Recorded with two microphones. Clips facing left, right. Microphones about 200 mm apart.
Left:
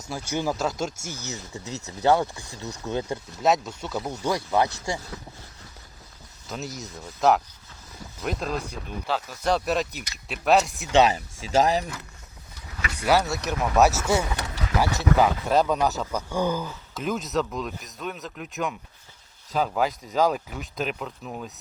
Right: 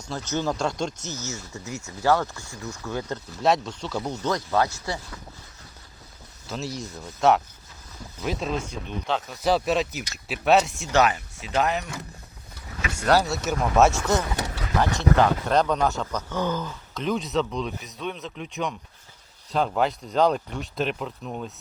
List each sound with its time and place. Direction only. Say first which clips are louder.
0.1 s speech: even; 10° left (ahead or behind)
3.4 s speech: even; centre (ahead or behind)
6.5 s speech: right 2 dB; centre (ahead or behind)
10.9 s speech: left 2 dB; 30° left (ahead or behind)
13.1 s speech: right 1 dB; centre (ahead or behind)